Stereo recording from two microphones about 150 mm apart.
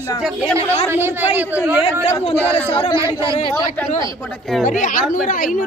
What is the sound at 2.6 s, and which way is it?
Speech, 35° left (ahead or behind).